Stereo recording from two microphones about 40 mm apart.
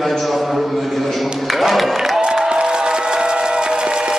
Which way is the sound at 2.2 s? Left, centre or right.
Right.